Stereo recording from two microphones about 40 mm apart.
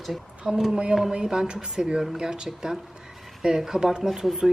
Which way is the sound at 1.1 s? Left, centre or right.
Centre.